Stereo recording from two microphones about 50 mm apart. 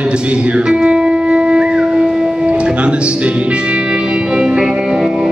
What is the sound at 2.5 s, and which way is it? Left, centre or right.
Music, right.